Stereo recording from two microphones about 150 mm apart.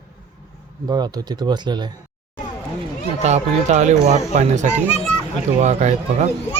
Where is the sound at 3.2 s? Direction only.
50° right (ahead or behind).